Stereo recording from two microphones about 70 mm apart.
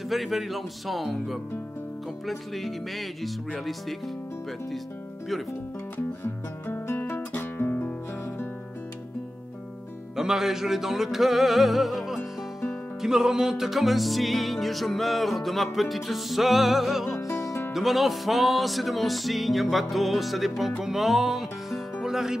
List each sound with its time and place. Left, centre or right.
0.1 s music: centre
6.2 s music: left
10.1 s music: centre
17.5 s music: left
17.7 s music: centre
22.0 s speech: centre